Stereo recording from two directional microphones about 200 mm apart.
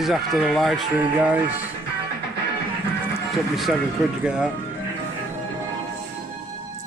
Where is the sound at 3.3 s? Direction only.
Centre (ahead or behind).